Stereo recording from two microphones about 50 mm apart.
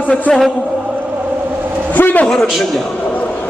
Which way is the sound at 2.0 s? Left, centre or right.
Left.